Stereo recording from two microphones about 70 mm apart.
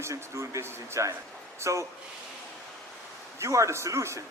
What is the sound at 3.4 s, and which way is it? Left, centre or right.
Speech, right.